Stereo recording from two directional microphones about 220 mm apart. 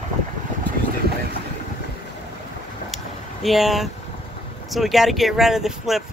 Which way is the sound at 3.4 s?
Centre (ahead or behind).